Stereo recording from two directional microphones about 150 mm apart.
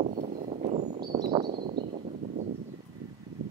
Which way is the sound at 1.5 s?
90° right.